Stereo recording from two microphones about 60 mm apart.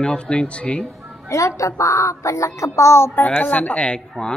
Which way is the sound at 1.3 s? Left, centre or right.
Left.